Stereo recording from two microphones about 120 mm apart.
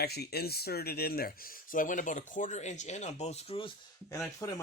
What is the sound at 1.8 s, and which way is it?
Speech, 90° left.